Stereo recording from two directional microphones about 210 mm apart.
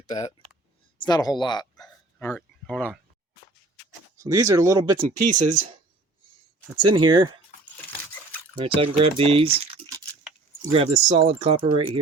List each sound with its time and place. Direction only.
0.0 s speech: 30° left (ahead or behind)
0.9 s speech: 20° left (ahead or behind)
1.7 s hiccup: 5° left (ahead or behind)
4.2 s speech: 15° right (ahead or behind)
5.2 s speech: 35° right (ahead or behind)
6.8 s speech: 90° right
7.1 s speech: 20° right (ahead or behind)
8.5 s speech: 25° right (ahead or behind)